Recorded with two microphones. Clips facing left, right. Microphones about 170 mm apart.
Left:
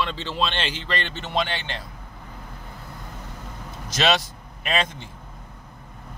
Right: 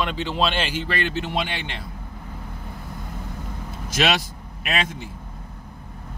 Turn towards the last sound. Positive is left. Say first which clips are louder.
# left 1 dB
turn(degrees=-5)  # may be behind; listen again after turning